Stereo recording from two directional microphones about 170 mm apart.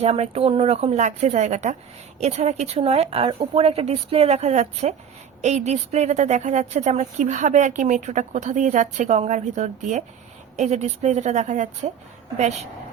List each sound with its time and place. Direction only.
0.0 s a woman's voice: 35° right (ahead or behind)